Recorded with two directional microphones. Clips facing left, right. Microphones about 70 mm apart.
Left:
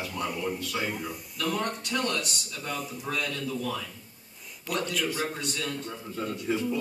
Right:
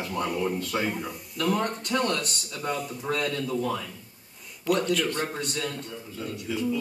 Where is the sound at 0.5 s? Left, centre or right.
Right.